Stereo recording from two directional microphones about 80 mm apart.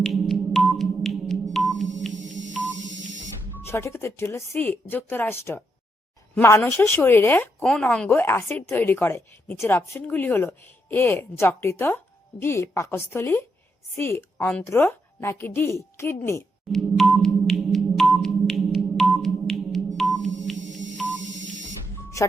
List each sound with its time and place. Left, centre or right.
0.0 s music: centre
3.6 s a woman's voice: left
7.6 s speech: centre
8.2 s a woman's voice: left
14.3 s a woman's voice: left
14.6 s a woman's voice: left
16.7 s sonar: centre
20.0 s telephone dialing: centre
21.9 s music: left